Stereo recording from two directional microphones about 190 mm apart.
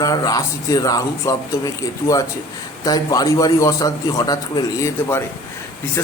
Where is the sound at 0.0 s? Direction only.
20° left (ahead or behind).